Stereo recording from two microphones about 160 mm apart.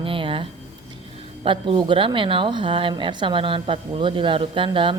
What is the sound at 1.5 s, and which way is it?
A woman's voice, 30° right (ahead or behind).